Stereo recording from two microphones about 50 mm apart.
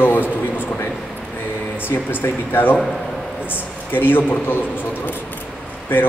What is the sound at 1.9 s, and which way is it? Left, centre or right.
A man's voice, left.